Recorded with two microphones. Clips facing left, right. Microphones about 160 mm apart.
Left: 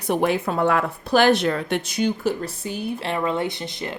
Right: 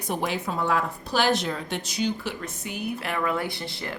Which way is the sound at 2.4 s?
30° left (ahead or behind).